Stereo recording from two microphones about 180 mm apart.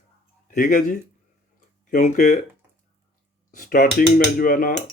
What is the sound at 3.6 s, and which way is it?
Speech, 50° left (ahead or behind).